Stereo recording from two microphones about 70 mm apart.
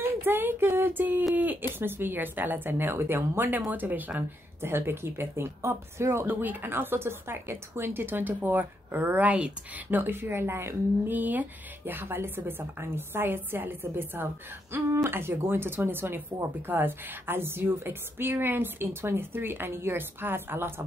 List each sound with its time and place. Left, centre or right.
0.0 s a sound: right
1.3 s speech: right
6.2 s speech: right
11.1 s speech: right